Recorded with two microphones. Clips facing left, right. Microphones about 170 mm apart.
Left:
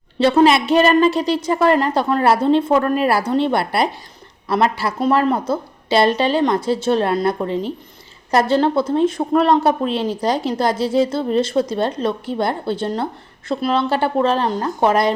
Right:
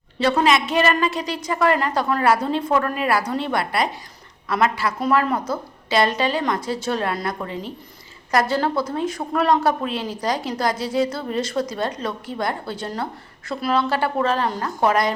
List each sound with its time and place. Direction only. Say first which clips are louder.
0.2 s a woman's voice: left 5 dB; 30° left (ahead or behind)